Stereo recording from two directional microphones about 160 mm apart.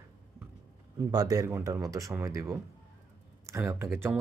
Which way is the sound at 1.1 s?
20° right (ahead or behind).